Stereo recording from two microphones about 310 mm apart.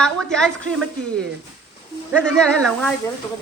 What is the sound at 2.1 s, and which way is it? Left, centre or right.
Speech, centre.